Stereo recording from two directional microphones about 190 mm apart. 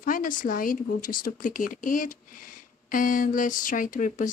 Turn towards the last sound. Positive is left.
turn(degrees=40)  # may be behind; listen again after turning